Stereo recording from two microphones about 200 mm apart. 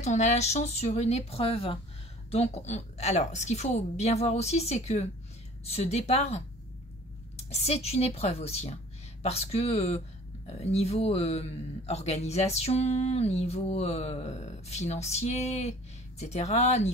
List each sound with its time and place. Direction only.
0.0 s speech: 35° left (ahead or behind)